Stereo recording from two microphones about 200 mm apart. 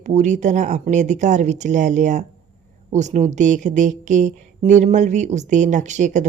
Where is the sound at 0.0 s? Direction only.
35° right (ahead or behind).